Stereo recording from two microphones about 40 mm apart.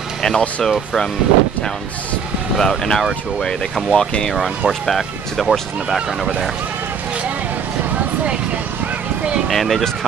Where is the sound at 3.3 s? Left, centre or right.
Centre.